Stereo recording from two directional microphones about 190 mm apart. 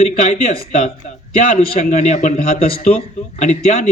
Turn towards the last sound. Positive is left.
turn(degrees=35)  # may be behind; listen again after turning